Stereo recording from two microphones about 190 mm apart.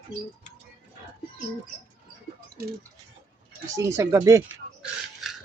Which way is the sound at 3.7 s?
15° right (ahead or behind).